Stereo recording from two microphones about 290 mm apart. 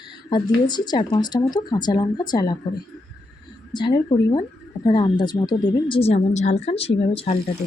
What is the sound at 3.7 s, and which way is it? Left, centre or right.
Speech, centre.